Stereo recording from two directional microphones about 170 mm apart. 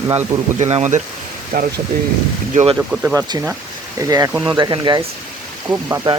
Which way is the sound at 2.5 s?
40° right (ahead or behind).